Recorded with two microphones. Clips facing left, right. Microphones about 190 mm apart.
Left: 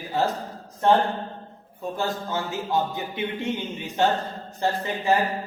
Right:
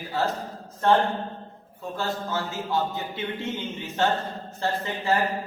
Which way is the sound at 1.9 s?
15° left (ahead or behind).